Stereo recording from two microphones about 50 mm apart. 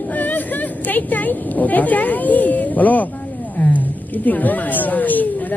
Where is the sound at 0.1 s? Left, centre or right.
Left.